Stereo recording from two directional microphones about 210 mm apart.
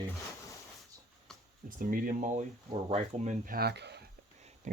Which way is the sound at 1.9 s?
35° right (ahead or behind).